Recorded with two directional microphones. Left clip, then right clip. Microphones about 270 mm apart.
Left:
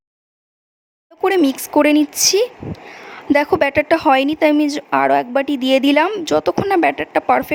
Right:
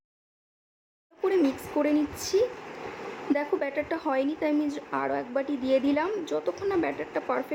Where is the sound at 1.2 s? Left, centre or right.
Left.